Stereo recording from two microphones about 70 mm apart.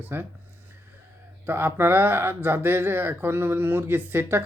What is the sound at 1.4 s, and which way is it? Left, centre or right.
Speech, right.